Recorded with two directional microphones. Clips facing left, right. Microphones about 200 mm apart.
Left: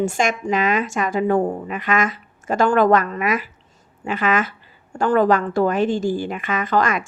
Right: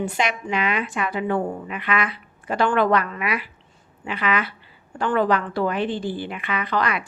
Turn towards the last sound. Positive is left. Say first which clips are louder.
# left 4 dB
turn(degrees=45)  # may be behind; listen again after turning